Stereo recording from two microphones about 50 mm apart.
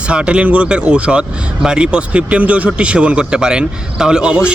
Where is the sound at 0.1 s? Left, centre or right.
Right.